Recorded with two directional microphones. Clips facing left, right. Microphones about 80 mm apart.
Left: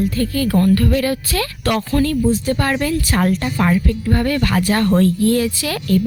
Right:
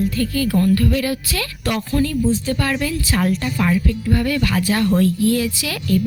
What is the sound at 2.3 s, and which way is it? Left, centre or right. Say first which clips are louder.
A woman's voice: left 2 dB; left.